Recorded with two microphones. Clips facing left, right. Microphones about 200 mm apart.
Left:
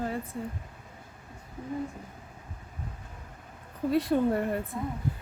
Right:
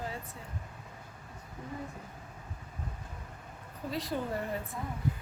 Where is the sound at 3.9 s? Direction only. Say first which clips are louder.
Left 10 dB; 60° left (ahead or behind).